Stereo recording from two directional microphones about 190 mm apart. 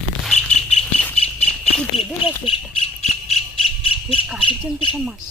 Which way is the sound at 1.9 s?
30° left (ahead or behind).